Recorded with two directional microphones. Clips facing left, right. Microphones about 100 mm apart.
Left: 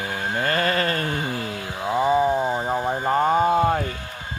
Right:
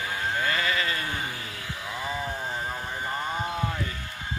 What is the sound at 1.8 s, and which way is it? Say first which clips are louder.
Wild animals: left 14 dB; 35° left (ahead or behind).